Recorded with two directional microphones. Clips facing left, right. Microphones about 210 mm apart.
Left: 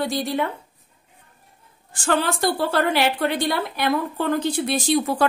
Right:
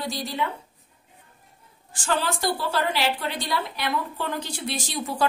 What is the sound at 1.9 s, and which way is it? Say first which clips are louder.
A woman's voice: left 4 dB; 55° left (ahead or behind).